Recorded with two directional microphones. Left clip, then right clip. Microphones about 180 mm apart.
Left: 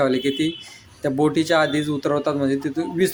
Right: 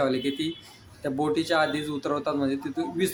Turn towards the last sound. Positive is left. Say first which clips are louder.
# left 6 dB
turn(degrees=20)  # may be behind; listen again after turning